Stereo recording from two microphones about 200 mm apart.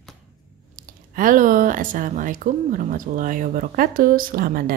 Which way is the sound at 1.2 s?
40° right (ahead or behind).